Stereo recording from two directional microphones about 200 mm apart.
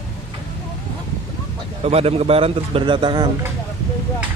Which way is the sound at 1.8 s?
30° right (ahead or behind).